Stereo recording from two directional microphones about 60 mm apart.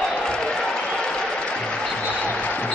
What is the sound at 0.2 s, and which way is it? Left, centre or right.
Music, centre.